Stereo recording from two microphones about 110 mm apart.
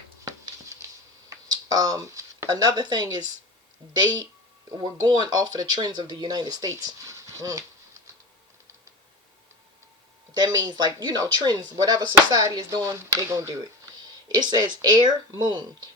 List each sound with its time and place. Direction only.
0.3 s a sound: 30° right (ahead or behind)
1.3 s speech: 35° right (ahead or behind)
10.3 s speech: 40° right (ahead or behind)
14.3 s speech: 40° right (ahead or behind)